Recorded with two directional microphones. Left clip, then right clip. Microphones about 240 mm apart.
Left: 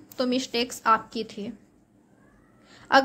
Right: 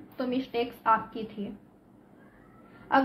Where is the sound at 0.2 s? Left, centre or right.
Left.